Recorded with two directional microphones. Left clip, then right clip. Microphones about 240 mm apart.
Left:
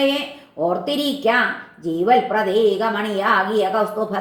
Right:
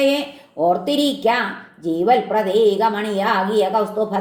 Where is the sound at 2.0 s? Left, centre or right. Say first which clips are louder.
Even; right.